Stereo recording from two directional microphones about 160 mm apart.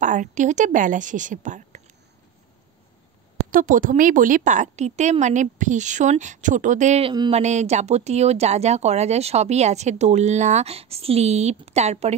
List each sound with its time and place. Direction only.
0.0 s speech: 50° right (ahead or behind)
3.4 s speech: 55° right (ahead or behind)
7.1 s speech: 35° right (ahead or behind)